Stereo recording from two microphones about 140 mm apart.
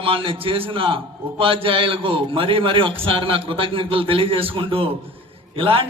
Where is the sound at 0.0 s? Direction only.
40° right (ahead or behind).